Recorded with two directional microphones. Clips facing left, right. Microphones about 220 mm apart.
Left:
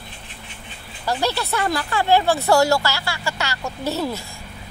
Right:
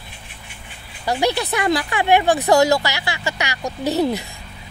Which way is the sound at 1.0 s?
15° right (ahead or behind).